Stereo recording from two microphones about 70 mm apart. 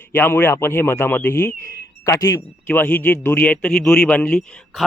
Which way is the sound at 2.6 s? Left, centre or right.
Left.